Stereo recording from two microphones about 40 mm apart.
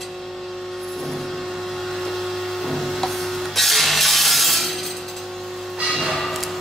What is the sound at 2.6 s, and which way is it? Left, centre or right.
Wood, centre.